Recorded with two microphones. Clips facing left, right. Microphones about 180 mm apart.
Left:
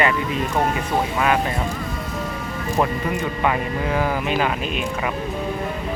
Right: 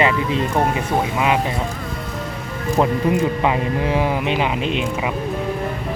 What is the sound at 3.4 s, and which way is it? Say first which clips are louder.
Speech: right 3 dB; 20° right (ahead or behind).